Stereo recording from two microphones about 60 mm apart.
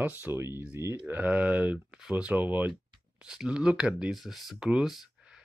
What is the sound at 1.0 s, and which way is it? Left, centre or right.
Speech, right.